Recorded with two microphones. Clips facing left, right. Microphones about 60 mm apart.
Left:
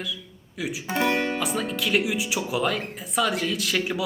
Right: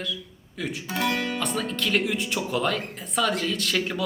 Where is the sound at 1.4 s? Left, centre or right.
Centre.